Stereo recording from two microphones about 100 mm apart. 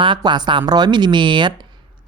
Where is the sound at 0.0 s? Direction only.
50° right (ahead or behind).